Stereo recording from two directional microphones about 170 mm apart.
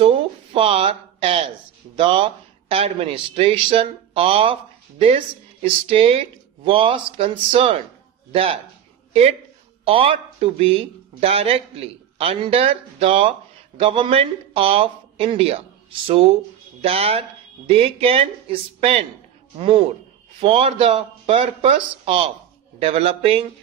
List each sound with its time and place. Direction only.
0.0 s a sound: 30° right (ahead or behind)
2.0 s a man's voice: 30° right (ahead or behind)
16.8 s speech: 35° right (ahead or behind)